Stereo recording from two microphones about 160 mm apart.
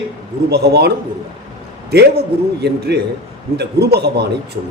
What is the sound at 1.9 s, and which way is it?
A man's voice, 90° right.